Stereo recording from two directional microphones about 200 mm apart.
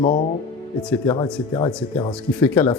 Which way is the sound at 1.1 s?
20° left (ahead or behind).